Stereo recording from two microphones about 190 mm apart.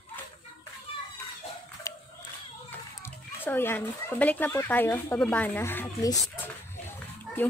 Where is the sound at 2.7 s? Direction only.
10° left (ahead or behind).